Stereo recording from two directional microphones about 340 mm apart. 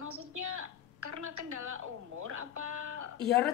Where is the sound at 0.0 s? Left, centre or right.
Right.